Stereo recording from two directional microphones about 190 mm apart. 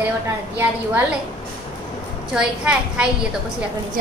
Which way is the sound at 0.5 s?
10° right (ahead or behind).